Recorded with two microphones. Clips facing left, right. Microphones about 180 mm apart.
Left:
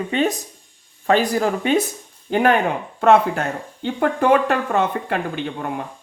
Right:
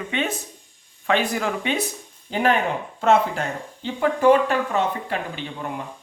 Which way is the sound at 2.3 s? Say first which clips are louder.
Left 4 dB; 55° left (ahead or behind).